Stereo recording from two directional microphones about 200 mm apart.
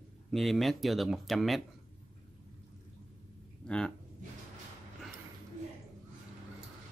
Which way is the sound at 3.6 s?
5° left (ahead or behind).